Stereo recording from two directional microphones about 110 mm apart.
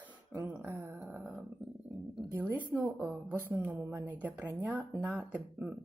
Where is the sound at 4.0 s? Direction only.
15° right (ahead or behind).